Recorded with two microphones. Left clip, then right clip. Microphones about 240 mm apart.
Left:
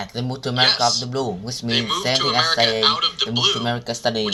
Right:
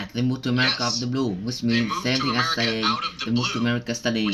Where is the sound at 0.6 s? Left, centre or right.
Left.